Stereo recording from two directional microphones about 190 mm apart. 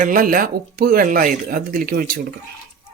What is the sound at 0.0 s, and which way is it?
Speech, 45° right (ahead or behind).